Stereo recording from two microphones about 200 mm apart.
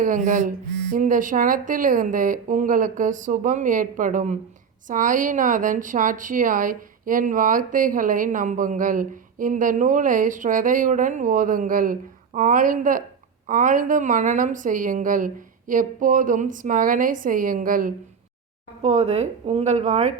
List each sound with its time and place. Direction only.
0.0 s a woman's voice: 40° right (ahead or behind)
18.8 s a woman's voice: 30° right (ahead or behind)